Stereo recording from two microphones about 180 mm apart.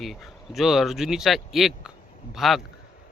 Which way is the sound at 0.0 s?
Centre (ahead or behind).